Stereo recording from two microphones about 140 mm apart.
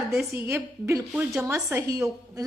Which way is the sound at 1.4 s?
20° right (ahead or behind).